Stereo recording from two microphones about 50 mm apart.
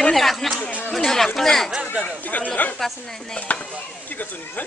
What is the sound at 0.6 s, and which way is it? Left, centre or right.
Chatter, left.